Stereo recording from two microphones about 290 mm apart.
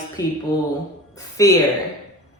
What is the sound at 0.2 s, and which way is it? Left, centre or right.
Speech, centre.